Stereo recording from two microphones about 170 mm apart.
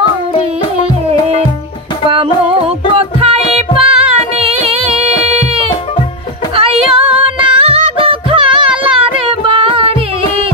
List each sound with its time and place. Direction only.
2.0 s music: 35° right (ahead or behind)